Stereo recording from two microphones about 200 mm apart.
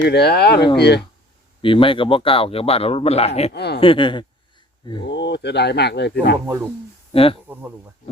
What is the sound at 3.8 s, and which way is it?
Speech, 25° left (ahead or behind).